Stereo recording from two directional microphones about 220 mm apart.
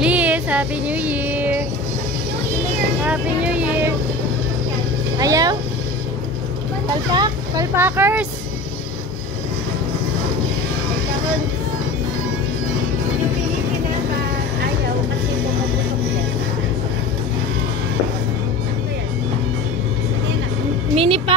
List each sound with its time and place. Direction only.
0.0 s music: 5° right (ahead or behind)
3.0 s speech: 5° right (ahead or behind)
5.2 s speech: 15° right (ahead or behind)
7.2 s speech: 15° right (ahead or behind)
20.9 s music: 25° right (ahead or behind)